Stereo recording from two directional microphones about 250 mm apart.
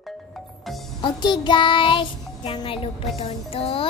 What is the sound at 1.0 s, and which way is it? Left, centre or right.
A child's voice, centre.